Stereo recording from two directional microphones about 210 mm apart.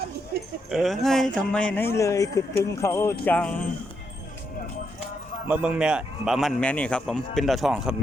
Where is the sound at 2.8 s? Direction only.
10° left (ahead or behind).